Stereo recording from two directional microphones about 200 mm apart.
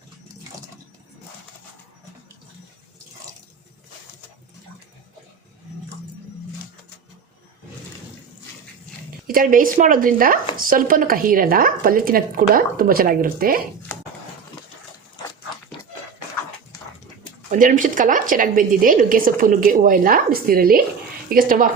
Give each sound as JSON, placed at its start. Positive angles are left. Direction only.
{"t": 9.2, "sound": "speech", "side_deg": -45}
{"t": 13.9, "sound": "a sound", "side_deg": 10}
{"t": 17.5, "sound": "speech", "side_deg": -40}